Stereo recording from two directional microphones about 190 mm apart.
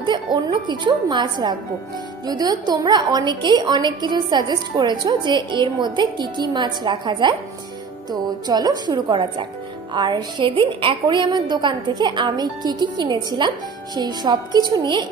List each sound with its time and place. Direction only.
0.0 s a woman's voice: 25° right (ahead or behind)